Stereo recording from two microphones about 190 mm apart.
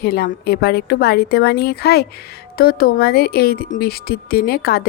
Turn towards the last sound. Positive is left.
turn(degrees=55)  # may be behind; listen again after turning